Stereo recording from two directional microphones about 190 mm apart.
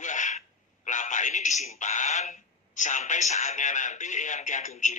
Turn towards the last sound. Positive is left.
turn(degrees=40)  # may be behind; listen again after turning